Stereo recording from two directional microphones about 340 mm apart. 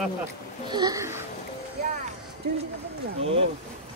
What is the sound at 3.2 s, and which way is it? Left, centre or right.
Speech, centre.